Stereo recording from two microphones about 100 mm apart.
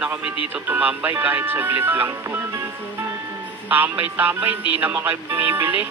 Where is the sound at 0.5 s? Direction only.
15° right (ahead or behind).